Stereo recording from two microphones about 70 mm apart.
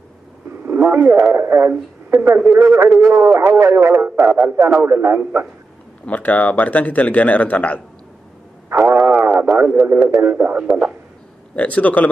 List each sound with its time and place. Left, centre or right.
0.7 s speech: right
4.2 s speech: right
6.0 s speech: left
8.6 s radio: right
10.2 s speech: right
11.5 s speech: left